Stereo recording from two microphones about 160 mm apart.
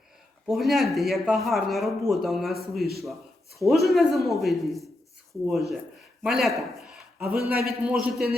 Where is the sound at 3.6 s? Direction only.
Centre (ahead or behind).